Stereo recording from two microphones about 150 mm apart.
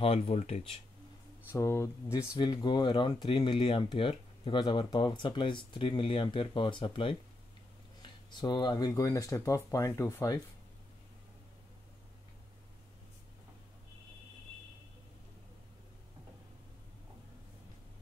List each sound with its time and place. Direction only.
0.0 s speech: 45° left (ahead or behind)
1.5 s speech: 20° left (ahead or behind)
2.3 s speech: 30° left (ahead or behind)
8.3 s speech: 30° left (ahead or behind)